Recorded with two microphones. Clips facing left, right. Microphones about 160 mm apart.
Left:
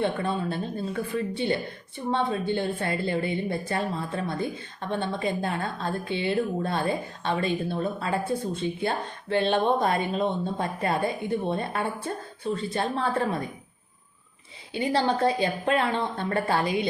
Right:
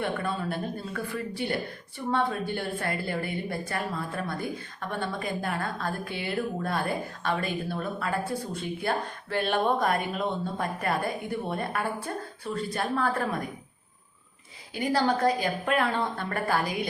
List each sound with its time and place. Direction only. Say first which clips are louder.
0.0 s a woman's voice: left 3 dB; 25° left (ahead or behind)
14.7 s a woman's voice: left 1 dB; 25° left (ahead or behind)